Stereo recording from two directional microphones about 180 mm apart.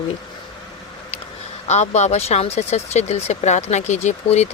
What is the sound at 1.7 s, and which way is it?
Speech, 40° left (ahead or behind).